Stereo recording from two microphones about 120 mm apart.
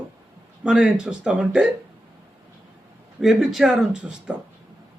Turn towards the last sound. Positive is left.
turn(degrees=-10)  # may be behind; listen again after turning